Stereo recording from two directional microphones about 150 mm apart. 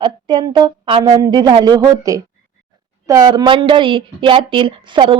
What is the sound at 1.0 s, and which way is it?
A woman's voice, 25° right (ahead or behind).